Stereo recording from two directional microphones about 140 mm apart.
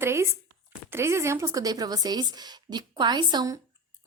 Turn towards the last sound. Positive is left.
turn(degrees=-25)  # may be behind; listen again after turning